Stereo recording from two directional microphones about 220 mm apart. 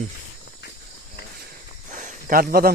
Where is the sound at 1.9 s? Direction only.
35° right (ahead or behind).